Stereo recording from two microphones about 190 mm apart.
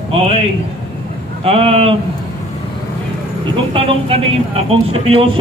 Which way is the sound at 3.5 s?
30° right (ahead or behind).